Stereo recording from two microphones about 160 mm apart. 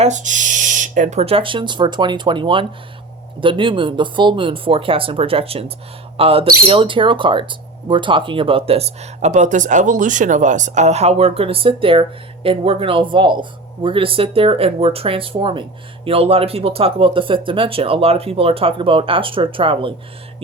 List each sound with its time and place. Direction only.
0.0 s speech: 50° right (ahead or behind); by 19.9 s 35° right (ahead or behind)